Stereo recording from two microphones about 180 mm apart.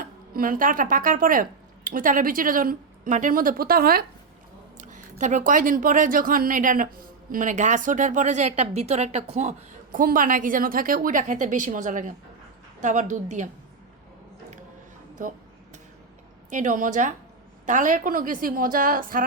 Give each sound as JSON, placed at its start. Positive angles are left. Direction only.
{"t": 0.0, "sound": "speech", "side_deg": -50}
{"t": 4.8, "sound": "a woman's voice", "side_deg": -45}
{"t": 15.2, "sound": "a woman's voice", "side_deg": -45}
{"t": 16.5, "sound": "a woman's voice", "side_deg": -45}